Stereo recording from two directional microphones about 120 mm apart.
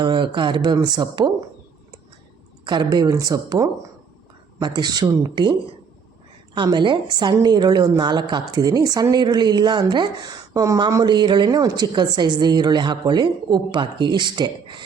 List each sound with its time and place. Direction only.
0.0 s a woman's voice: 40° right (ahead or behind)
2.6 s a woman's voice: 35° right (ahead or behind)